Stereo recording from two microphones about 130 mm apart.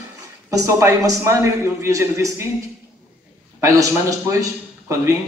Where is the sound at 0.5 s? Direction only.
25° right (ahead or behind).